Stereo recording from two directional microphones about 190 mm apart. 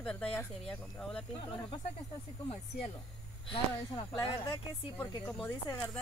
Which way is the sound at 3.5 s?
30° left (ahead or behind).